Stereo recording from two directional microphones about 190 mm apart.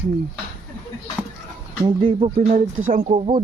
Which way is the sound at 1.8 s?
25° right (ahead or behind).